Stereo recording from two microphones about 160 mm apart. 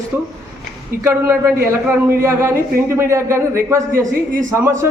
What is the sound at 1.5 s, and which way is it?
Speech, 15° right (ahead or behind).